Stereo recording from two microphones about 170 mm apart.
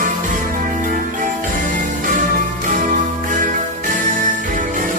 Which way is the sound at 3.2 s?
50° right (ahead or behind).